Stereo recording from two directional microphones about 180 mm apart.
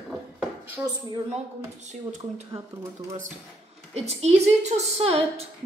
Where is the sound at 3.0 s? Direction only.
45° right (ahead or behind).